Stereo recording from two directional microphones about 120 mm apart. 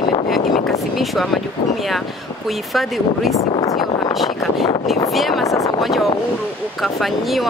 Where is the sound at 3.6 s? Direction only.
35° left (ahead or behind).